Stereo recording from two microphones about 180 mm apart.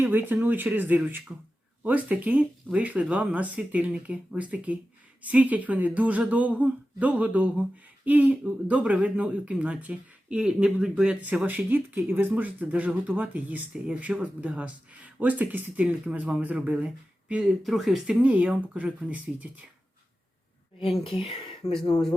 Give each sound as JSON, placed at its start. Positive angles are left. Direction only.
{"t": 0.0, "sound": "speech", "side_deg": -10}
{"t": 21.0, "sound": "speech", "side_deg": 30}
{"t": 21.6, "sound": "speech", "side_deg": 15}